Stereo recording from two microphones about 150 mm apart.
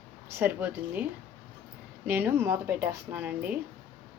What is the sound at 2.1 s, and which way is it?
A woman's voice, 15° right (ahead or behind).